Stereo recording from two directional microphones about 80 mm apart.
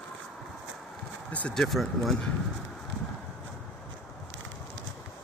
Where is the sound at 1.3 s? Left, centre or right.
Centre.